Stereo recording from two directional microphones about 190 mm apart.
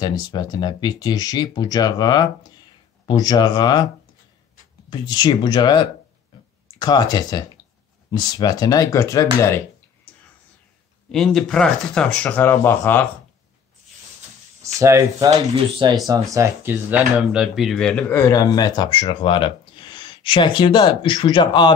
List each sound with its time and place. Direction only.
0.0 s speech: 20° left (ahead or behind)
4.8 s speech: 20° left (ahead or behind)
6.8 s speech: 20° left (ahead or behind)
11.1 s speech: centre (ahead or behind)
14.6 s speech: 15° right (ahead or behind)
15.2 s speech: 25° right (ahead or behind)
16.1 s speech: 15° right (ahead or behind); by 21.7 s 25° left (ahead or behind)